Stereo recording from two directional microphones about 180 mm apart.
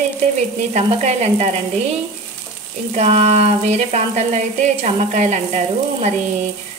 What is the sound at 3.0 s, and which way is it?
Frying, 35° right (ahead or behind).